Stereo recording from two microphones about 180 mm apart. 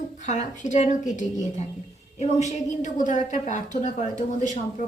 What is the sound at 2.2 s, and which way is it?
A woman's voice, 40° left (ahead or behind).